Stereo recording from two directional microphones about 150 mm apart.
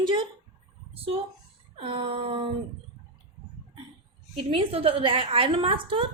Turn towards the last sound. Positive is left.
turn(degrees=-35)  # may be behind; listen again after turning